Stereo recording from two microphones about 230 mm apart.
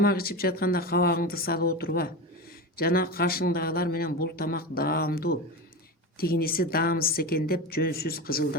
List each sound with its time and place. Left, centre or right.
0.0 s a man's voice: left